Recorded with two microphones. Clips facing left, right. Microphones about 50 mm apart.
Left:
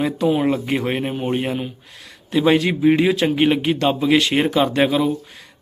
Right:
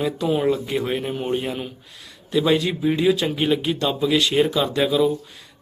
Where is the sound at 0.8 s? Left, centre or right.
Left.